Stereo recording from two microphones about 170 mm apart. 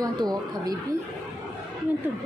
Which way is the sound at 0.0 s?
25° right (ahead or behind).